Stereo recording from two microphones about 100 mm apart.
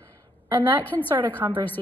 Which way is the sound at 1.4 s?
35° right (ahead or behind).